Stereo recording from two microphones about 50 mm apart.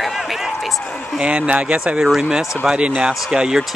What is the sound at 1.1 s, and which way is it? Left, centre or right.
Speech, right.